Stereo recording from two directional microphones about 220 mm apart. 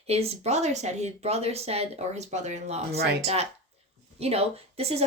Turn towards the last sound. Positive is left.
turn(degrees=-30)  # may be behind; listen again after turning